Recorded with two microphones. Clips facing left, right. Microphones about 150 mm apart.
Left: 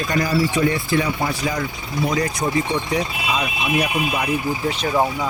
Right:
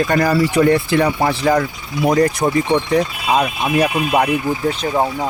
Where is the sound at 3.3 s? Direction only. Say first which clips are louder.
Right 6 dB; 55° right (ahead or behind).